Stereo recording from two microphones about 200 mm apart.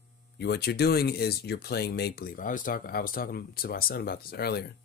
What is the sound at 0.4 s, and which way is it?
Speech, 55° left (ahead or behind).